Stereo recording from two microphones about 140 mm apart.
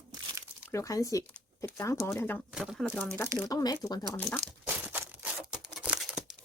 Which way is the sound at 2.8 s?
10° left (ahead or behind).